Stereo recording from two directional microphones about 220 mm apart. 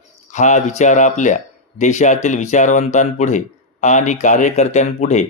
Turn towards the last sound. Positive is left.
turn(degrees=30)  # may be behind; listen again after turning